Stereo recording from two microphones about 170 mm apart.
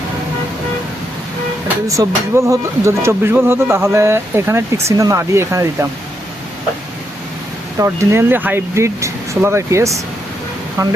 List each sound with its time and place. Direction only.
1.6 s speech: 15° right (ahead or behind)
7.8 s a woman's voice: 15° right (ahead or behind)